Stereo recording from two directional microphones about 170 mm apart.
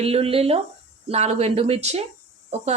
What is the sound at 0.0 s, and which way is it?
Speech, 35° right (ahead or behind).